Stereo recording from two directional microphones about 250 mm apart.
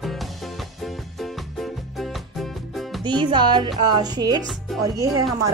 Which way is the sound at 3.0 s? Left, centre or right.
Centre.